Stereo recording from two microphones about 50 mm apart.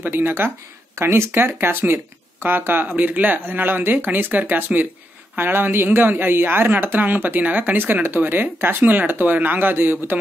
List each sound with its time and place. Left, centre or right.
0.0 s speech: right
0.9 s a woman's voice: right